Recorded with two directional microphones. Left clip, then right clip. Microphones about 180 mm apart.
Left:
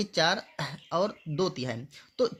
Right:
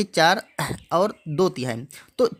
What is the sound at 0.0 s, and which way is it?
Speech, 35° right (ahead or behind).